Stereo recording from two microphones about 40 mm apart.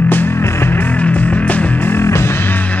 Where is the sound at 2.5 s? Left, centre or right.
Left.